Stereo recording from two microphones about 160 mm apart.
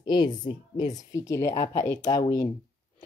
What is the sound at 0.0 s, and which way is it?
Speech, 25° left (ahead or behind).